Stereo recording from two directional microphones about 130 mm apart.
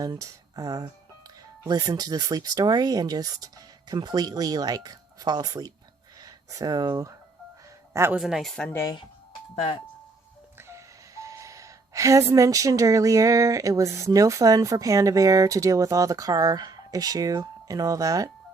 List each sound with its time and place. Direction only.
0.0 s speech: 25° right (ahead or behind)
8.1 s speech: 5° right (ahead or behind)
10.6 s speech: 20° right (ahead or behind)